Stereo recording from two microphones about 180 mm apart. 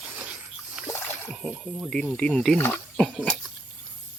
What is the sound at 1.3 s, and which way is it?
Speech, 5° right (ahead or behind).